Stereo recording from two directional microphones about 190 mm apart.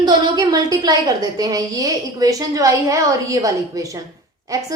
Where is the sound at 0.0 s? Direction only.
20° right (ahead or behind).